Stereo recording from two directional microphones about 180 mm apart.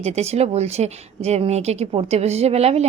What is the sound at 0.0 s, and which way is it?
Speech, 35° right (ahead or behind).